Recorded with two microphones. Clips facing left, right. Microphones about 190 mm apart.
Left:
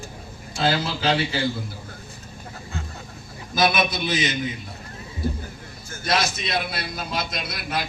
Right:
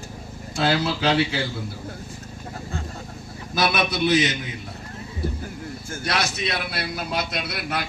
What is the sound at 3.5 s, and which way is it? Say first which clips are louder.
Speech: left 1 dB; 65° right (ahead or behind).